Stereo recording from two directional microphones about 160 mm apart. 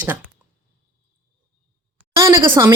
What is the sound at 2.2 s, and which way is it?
Speech, 15° right (ahead or behind).